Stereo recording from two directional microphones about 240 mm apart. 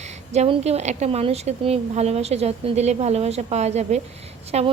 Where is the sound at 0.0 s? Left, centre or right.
Right.